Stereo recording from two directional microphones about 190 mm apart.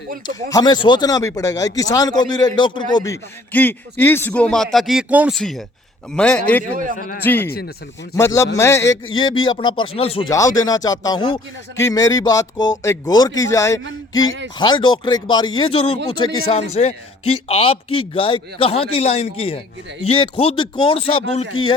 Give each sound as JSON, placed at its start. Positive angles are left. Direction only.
{"t": 0.3, "sound": "speech", "side_deg": 20}
{"t": 9.1, "sound": "speech", "side_deg": 25}
{"t": 10.2, "sound": "speech", "side_deg": 15}
{"t": 14.1, "sound": "speech", "side_deg": 90}
{"t": 14.6, "sound": "a man's voice", "side_deg": 25}